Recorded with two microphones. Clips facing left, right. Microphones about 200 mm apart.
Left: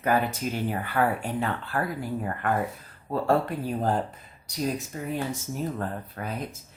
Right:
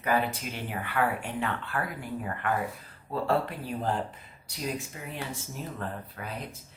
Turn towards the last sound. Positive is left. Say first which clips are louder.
# left 5 dB
turn(degrees=45)  # may be behind; listen again after turning